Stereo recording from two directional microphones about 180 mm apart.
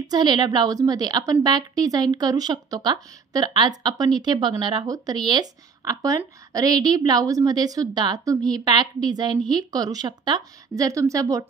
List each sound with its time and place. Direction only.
0.0 s a woman's voice: 25° right (ahead or behind)